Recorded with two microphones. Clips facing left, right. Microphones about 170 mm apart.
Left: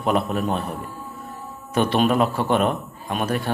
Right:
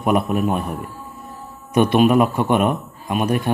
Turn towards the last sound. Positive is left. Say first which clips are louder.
# right 4 dB
turn(degrees=-15)  # may be behind; listen again after turning